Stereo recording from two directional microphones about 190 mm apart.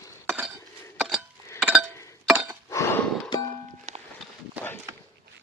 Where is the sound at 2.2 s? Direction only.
5° right (ahead or behind).